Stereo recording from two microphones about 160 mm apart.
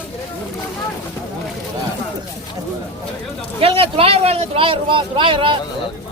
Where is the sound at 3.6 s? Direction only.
35° right (ahead or behind).